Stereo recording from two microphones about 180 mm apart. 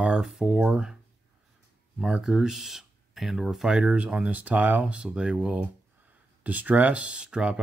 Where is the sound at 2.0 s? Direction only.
5° right (ahead or behind).